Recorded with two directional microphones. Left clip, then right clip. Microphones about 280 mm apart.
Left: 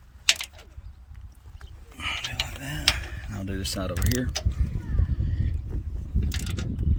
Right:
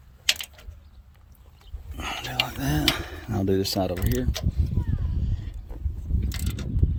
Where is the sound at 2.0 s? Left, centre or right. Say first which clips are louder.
Right 2 dB; centre.